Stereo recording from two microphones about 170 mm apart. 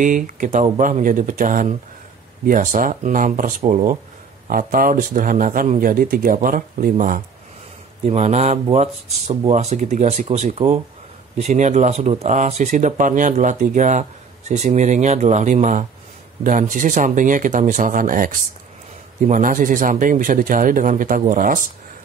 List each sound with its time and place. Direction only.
0.0 s speech: 50° right (ahead or behind)
3.6 s speech: 40° right (ahead or behind)
4.5 s speech: 55° right (ahead or behind)
8.0 s speech: 40° right (ahead or behind)